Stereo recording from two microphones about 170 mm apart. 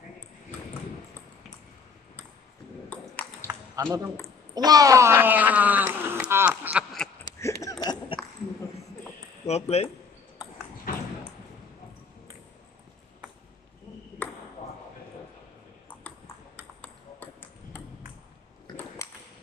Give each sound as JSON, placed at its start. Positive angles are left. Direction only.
{"t": 2.9, "sound": "ping", "side_deg": 10}
{"t": 3.4, "sound": "a sound", "side_deg": -15}
{"t": 4.6, "sound": "speech", "side_deg": -20}
{"t": 7.2, "sound": "a sound", "side_deg": 15}
{"t": 9.5, "sound": "speech", "side_deg": 40}
{"t": 14.2, "sound": "ping", "side_deg": 10}